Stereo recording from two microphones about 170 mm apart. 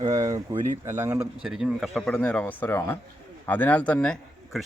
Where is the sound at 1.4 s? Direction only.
Centre (ahead or behind).